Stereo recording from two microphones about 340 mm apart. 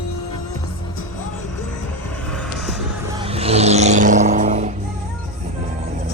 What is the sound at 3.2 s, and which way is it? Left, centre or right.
Vehicle, centre.